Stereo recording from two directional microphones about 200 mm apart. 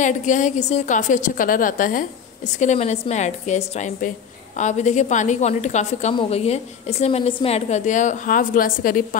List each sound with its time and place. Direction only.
0.0 s a woman's voice: 40° left (ahead or behind)